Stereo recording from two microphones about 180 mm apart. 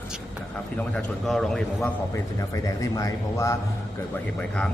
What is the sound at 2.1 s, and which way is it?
A man's voice, 20° left (ahead or behind).